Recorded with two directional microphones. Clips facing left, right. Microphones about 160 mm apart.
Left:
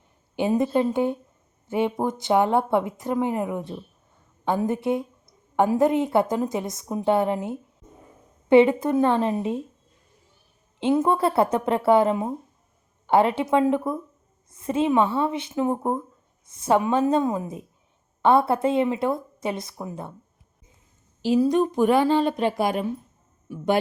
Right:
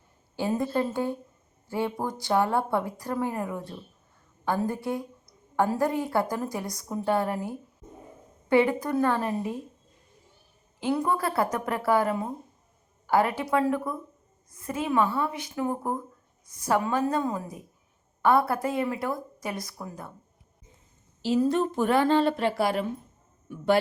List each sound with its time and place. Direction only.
0.3 s speech: 20° left (ahead or behind)
10.8 s speech: 25° left (ahead or behind)
21.2 s speech: 15° left (ahead or behind)